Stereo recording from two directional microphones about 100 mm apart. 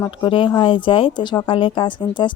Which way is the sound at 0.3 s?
55° left (ahead or behind).